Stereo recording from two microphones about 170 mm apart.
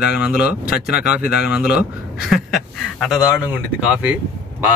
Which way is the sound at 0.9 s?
65° left (ahead or behind).